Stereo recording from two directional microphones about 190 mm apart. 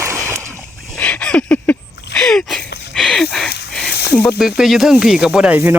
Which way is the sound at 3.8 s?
60° left (ahead or behind).